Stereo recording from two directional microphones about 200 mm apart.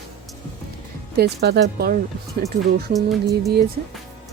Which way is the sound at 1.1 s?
55° right (ahead or behind).